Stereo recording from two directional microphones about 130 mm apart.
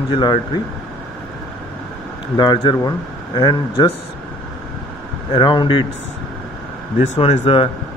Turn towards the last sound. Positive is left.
turn(degrees=45)  # may be behind; listen again after turning